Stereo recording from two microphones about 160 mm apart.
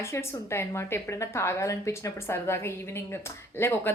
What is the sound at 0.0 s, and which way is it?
A woman's voice, 15° left (ahead or behind).